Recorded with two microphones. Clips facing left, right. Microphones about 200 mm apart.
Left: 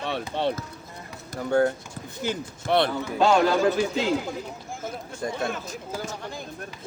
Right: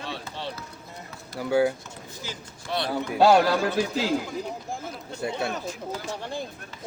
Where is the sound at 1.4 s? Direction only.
5° right (ahead or behind).